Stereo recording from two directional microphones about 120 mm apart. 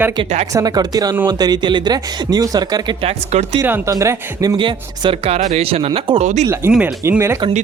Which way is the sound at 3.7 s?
20° right (ahead or behind).